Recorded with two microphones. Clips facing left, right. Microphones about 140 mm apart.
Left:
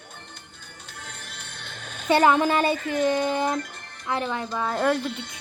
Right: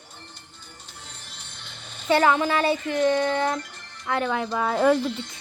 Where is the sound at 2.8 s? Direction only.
45° left (ahead or behind).